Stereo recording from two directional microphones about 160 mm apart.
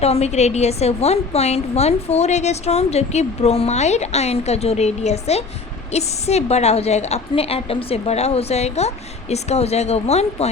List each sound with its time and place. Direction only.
0.0 s a woman's voice: 40° left (ahead or behind)